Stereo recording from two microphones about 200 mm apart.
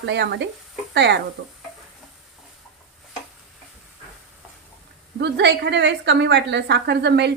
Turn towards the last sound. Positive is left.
turn(degrees=-60)  # may be behind; listen again after turning